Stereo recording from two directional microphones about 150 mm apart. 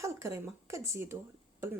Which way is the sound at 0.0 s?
20° right (ahead or behind).